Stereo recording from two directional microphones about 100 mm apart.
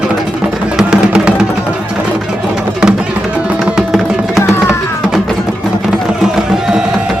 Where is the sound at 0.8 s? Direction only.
10° right (ahead or behind).